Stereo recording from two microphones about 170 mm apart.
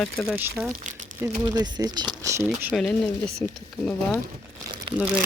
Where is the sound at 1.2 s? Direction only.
25° right (ahead or behind).